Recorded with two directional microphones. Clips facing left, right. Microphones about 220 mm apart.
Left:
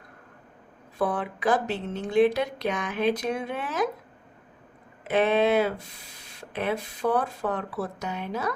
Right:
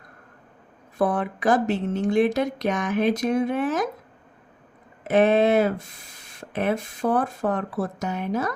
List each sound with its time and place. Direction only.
0.9 s a woman's voice: 45° right (ahead or behind)
5.0 s a woman's voice: 45° right (ahead or behind)